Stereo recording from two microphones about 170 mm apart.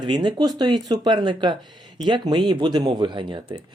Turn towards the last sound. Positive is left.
turn(degrees=-25)  # may be behind; listen again after turning